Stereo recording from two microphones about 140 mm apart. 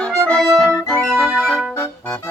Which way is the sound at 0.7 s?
5° left (ahead or behind).